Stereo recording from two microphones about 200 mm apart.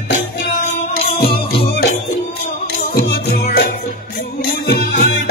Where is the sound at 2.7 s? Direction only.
45° left (ahead or behind).